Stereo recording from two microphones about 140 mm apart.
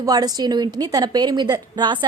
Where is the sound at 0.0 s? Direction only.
30° right (ahead or behind).